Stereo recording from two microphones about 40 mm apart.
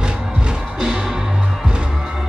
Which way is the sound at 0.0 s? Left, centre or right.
Right.